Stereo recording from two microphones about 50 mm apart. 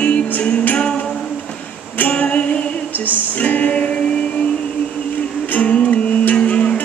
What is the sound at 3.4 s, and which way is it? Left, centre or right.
Music, left.